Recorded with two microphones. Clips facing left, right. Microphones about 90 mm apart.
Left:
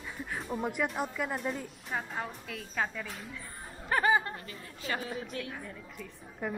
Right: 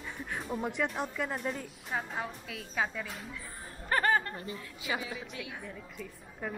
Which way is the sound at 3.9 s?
5° left (ahead or behind).